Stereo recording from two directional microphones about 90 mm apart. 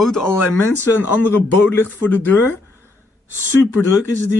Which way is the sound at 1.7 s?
20° left (ahead or behind).